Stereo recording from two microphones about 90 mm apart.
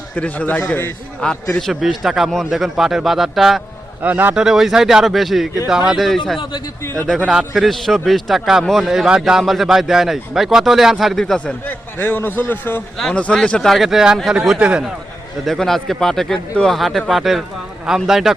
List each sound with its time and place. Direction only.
0.2 s a man's voice: 15° left (ahead or behind)
1.2 s a man's voice: 10° left (ahead or behind)
4.0 s speech: 20° right (ahead or behind)
4.4 s a man's voice: 5° right (ahead or behind); by 12.8 s 20° left (ahead or behind)
13.0 s a man's voice: 5° left (ahead or behind)
15.4 s a man's voice: 5° left (ahead or behind)